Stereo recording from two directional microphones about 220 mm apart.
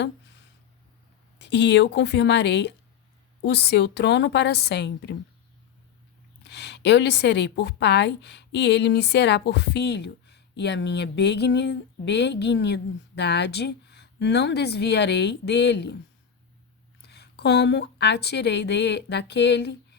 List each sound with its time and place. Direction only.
1.4 s a woman's voice: 50° left (ahead or behind)
6.4 s a woman's voice: 50° left (ahead or behind)
17.0 s speech: 50° left (ahead or behind)